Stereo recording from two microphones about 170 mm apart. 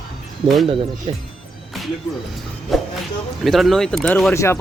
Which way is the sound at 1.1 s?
30° right (ahead or behind).